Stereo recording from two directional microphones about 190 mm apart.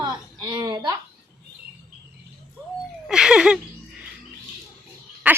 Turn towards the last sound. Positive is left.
turn(degrees=-10)  # may be behind; listen again after turning